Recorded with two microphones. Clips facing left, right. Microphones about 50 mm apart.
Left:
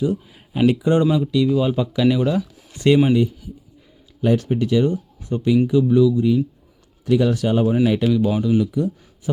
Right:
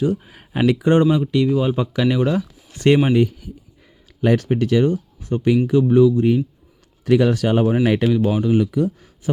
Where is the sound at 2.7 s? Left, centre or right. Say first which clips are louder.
Even; right.